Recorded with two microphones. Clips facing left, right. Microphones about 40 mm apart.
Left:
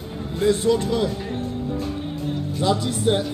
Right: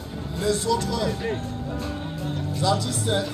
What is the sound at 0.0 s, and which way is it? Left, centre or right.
Music, left.